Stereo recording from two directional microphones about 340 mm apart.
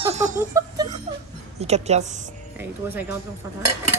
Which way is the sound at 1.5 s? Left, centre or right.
Centre.